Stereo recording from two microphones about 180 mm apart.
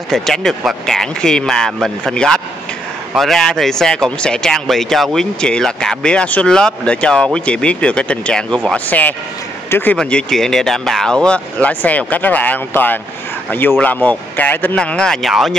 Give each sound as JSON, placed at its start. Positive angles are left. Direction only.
{"t": 0.1, "sound": "speech", "side_deg": 0}